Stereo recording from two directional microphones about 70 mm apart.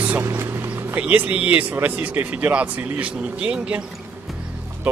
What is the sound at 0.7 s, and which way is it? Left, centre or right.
Speech, right.